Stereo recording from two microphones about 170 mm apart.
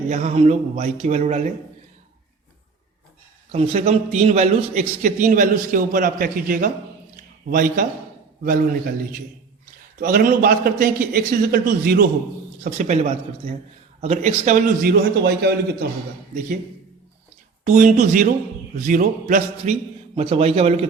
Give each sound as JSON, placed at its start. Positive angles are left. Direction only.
{"t": 0.1, "sound": "a man's voice", "side_deg": -40}
{"t": 3.5, "sound": "a man's voice", "side_deg": -40}
{"t": 7.2, "sound": "a sound", "side_deg": -55}
{"t": 8.4, "sound": "a man's voice", "side_deg": -55}
{"t": 12.6, "sound": "a man's voice", "side_deg": -45}
{"t": 14.8, "sound": "a man's voice", "side_deg": -70}
{"t": 17.7, "sound": "a man's voice", "side_deg": -45}